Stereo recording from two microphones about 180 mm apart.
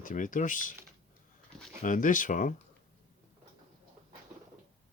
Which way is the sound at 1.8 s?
45° left (ahead or behind).